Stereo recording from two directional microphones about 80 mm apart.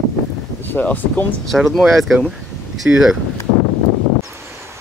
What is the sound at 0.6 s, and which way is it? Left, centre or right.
Speech, left.